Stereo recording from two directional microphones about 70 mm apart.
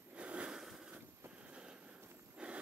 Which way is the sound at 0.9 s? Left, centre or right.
Centre.